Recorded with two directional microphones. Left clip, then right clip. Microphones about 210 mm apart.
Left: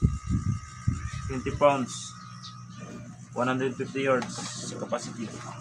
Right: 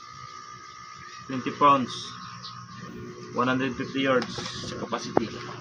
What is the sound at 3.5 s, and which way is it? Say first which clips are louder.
Speech: right 1 dB; 10° left (ahead or behind).